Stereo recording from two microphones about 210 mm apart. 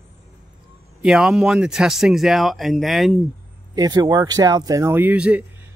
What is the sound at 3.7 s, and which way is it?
Speech, 15° right (ahead or behind).